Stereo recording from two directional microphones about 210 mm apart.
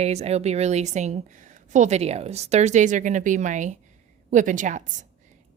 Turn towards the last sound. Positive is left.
turn(degrees=-35)  # may be behind; listen again after turning